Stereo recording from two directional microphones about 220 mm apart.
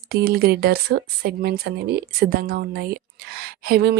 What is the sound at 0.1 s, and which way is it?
Speech, 45° right (ahead or behind).